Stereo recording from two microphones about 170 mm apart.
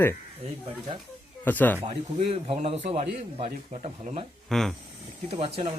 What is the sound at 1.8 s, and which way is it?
A man's voice, 35° right (ahead or behind).